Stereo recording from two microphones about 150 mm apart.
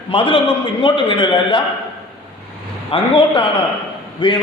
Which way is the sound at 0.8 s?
30° left (ahead or behind).